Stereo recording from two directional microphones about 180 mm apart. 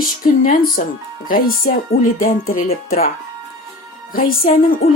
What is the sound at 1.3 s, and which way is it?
Speech, 50° left (ahead or behind).